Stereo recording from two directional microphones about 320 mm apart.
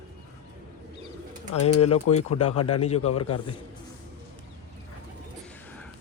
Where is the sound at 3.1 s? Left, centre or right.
Left.